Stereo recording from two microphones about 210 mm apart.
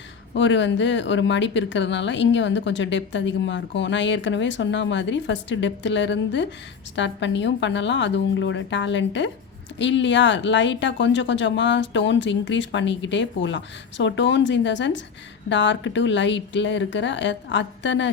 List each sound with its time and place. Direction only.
0.3 s speech: 60° left (ahead or behind)